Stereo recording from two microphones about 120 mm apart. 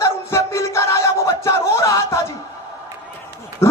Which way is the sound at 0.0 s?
25° left (ahead or behind).